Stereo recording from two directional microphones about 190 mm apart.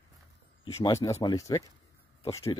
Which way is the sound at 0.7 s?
15° left (ahead or behind).